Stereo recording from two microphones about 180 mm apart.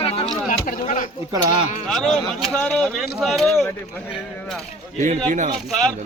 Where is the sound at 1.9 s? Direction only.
Centre (ahead or behind).